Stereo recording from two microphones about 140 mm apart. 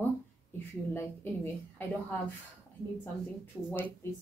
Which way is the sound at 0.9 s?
15° left (ahead or behind).